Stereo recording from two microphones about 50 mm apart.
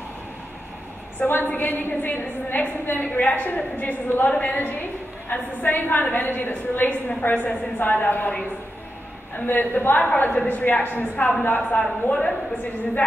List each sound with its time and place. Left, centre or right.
1.2 s a woman's voice: left
4.3 s speech: left
4.6 s a woman's voice: left
9.5 s a woman's voice: left
12.0 s speech: left